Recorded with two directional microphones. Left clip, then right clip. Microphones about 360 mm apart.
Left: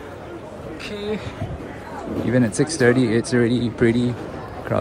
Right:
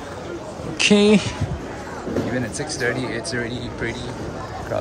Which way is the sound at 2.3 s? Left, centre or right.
Centre.